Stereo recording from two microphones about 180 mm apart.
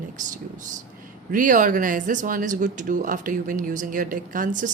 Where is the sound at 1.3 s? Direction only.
45° right (ahead or behind).